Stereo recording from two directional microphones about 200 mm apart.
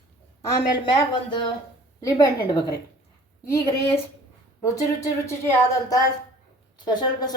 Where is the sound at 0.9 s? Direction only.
25° left (ahead or behind).